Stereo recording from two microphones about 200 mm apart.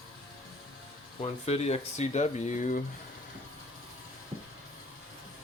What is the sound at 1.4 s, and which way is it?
Speech, 30° left (ahead or behind).